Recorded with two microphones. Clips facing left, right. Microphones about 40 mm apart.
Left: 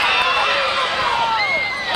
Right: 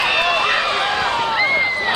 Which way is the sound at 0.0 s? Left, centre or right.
Centre.